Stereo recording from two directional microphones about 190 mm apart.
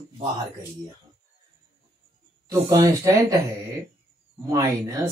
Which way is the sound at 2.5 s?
15° right (ahead or behind).